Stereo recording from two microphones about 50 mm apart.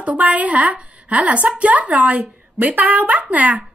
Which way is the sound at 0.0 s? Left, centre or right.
Right.